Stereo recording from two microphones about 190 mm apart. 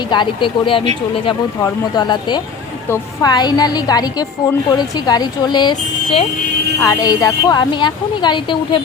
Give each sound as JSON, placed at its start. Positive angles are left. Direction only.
{"t": 0.1, "sound": "a woman's voice", "side_deg": 25}